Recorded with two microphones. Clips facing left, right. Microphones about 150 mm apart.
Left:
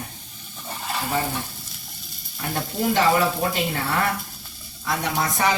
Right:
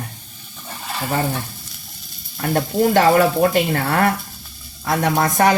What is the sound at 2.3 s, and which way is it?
Speech, 60° right (ahead or behind).